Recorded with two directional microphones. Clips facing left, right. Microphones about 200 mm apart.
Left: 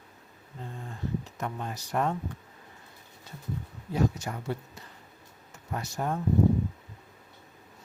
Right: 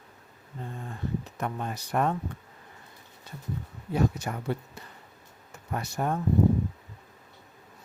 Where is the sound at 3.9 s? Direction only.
60° right (ahead or behind).